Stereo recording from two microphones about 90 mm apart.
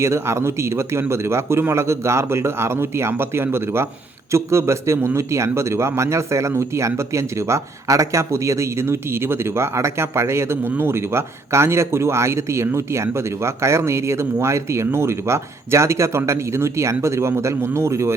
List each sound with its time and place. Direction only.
0.0 s a man's voice: 30° right (ahead or behind)